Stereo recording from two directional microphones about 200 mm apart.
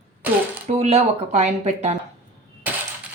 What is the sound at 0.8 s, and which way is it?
A woman's voice, 35° right (ahead or behind).